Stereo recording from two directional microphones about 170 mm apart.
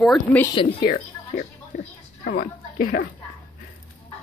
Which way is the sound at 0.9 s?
55° left (ahead or behind).